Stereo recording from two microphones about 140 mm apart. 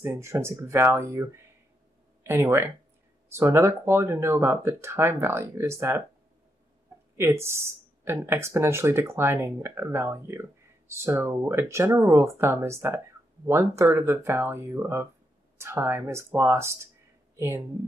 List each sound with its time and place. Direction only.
0.0 s speech: 20° right (ahead or behind)
7.2 s speech: 20° right (ahead or behind)